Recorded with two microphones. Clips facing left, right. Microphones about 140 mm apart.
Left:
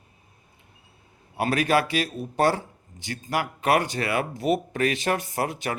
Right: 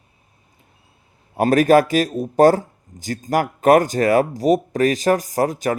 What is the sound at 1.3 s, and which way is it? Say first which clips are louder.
Speech: right 9 dB; 45° right (ahead or behind).